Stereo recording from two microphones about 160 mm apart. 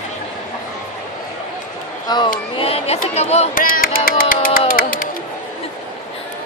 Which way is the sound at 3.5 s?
60° left (ahead or behind).